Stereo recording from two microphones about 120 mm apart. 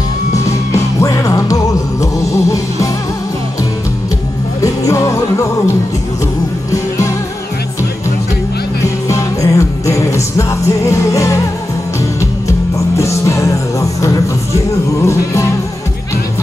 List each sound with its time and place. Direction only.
1.0 s music: 30° left (ahead or behind)
4.6 s music: 25° left (ahead or behind)
8.8 s music: 25° left (ahead or behind)
12.9 s music: 25° left (ahead or behind)